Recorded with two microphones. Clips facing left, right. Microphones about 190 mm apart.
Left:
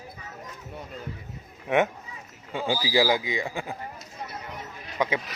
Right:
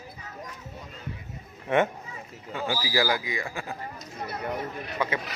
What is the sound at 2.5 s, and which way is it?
Speech, 20° left (ahead or behind).